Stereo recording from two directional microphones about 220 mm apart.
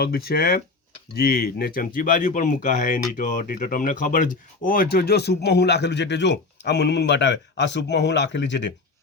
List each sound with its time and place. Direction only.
0.0 s speech: 45° left (ahead or behind)